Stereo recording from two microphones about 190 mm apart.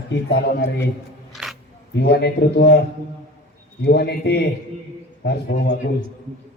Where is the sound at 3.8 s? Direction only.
60° left (ahead or behind).